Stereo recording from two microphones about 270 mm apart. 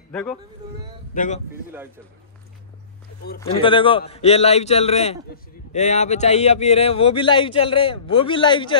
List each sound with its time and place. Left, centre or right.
0.1 s speech: centre
1.1 s a man's voice: left
3.3 s a man's voice: centre